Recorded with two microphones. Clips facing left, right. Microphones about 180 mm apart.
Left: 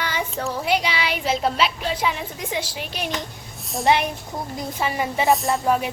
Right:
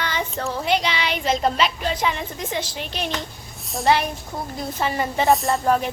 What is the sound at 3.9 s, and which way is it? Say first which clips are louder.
Speech: even; 20° left (ahead or behind).